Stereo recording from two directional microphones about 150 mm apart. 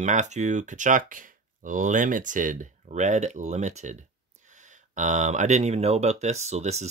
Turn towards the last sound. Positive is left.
turn(degrees=-45)  # may be behind; listen again after turning